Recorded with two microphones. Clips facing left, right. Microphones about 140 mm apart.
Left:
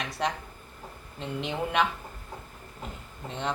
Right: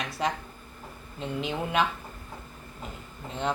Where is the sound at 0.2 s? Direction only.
Centre (ahead or behind).